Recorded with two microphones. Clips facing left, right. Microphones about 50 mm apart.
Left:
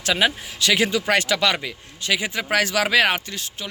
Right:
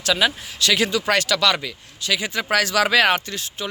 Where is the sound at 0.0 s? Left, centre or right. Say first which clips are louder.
Even; left.